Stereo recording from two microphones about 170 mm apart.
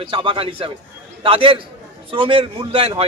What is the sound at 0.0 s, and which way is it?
A man's voice, 30° right (ahead or behind).